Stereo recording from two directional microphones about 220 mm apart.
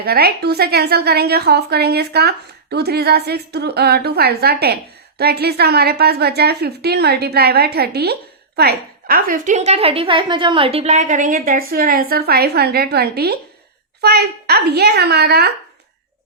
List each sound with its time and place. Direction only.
0.0 s a woman's voice: 45° right (ahead or behind)